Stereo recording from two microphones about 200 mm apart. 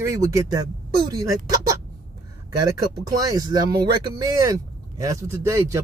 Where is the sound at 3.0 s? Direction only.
15° right (ahead or behind).